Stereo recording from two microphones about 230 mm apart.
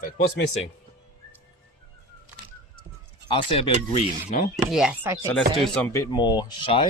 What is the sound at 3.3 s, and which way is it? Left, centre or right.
Speech, left.